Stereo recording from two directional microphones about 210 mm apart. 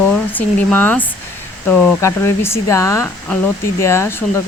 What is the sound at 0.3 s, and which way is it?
Speech, 10° left (ahead or behind).